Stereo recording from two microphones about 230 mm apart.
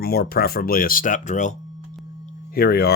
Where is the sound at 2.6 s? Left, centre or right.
Left.